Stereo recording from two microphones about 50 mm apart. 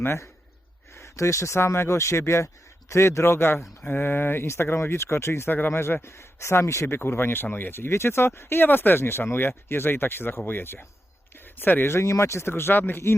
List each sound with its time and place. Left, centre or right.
0.9 s speech: left
5.5 s speech: left
5.8 s speech: left
6.9 s speech: left
11.9 s speech: left